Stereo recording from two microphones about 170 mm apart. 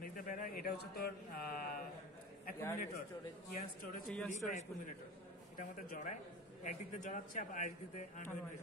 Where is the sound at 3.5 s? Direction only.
55° left (ahead or behind).